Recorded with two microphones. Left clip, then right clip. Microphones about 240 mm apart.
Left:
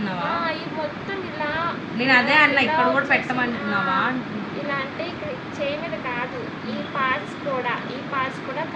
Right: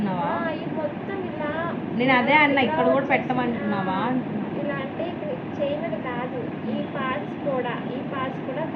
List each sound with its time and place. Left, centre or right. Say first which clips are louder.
2.0 s a woman's voice: left 2 dB; left